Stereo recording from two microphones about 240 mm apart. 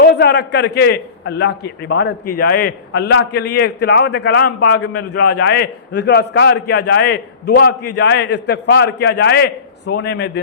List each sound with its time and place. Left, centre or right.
0.0 s a man's voice: left